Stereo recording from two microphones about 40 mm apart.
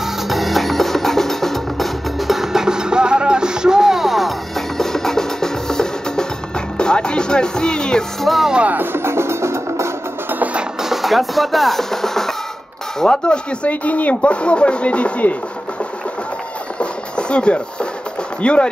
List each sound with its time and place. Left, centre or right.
0.0 s music: centre
4.7 s music: centre
8.2 s speech: centre
8.9 s music: right
10.8 s music: centre
13.0 s speech: left
13.7 s speech: left
17.3 s speech: left